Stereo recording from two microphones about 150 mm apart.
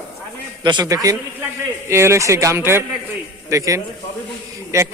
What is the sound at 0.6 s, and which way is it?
Speech, 25° right (ahead or behind).